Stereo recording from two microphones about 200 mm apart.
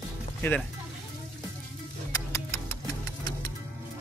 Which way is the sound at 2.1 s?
15° left (ahead or behind).